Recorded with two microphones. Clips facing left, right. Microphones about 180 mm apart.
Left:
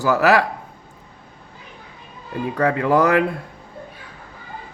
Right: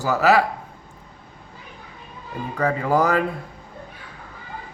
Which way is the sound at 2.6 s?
70° left (ahead or behind).